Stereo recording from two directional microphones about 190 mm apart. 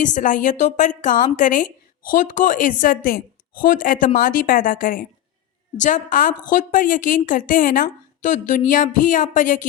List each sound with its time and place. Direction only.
0.0 s a woman's voice: 40° left (ahead or behind)